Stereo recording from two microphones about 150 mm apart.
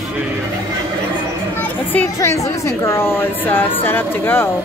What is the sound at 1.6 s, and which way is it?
Speech, 10° left (ahead or behind).